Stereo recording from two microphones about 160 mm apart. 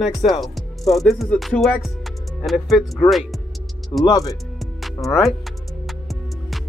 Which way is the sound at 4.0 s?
25° left (ahead or behind).